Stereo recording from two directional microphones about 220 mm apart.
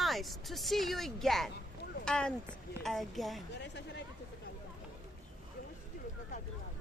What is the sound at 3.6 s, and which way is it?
Speech, 50° left (ahead or behind).